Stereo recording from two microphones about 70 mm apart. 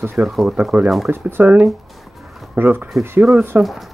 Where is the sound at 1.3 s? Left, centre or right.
Right.